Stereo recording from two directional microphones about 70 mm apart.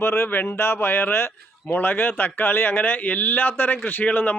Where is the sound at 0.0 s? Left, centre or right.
Left.